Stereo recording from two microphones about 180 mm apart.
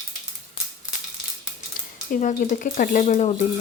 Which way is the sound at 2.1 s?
45° left (ahead or behind).